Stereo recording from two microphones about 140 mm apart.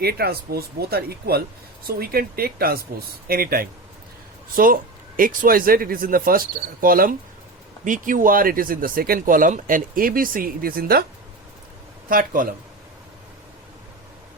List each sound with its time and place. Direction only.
0.0 s speech: 90° right
7.9 s speech: 70° right (ahead or behind); by 11.0 s 90° right
12.0 s speech: 80° right